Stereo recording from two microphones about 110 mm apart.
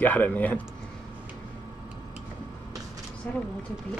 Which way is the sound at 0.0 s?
15° left (ahead or behind).